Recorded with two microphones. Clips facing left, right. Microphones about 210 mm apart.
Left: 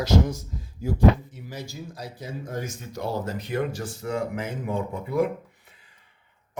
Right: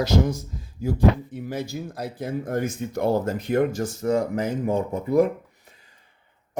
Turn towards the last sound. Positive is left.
turn(degrees=-40)  # may be behind; listen again after turning